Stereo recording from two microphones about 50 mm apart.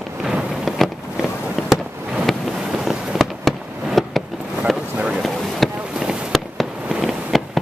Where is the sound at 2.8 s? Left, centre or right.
Centre.